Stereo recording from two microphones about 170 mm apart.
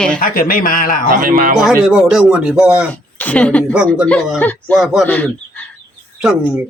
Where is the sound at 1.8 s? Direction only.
5° right (ahead or behind).